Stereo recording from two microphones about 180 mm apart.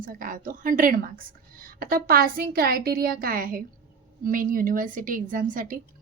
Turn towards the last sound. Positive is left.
turn(degrees=-50)  # may be behind; listen again after turning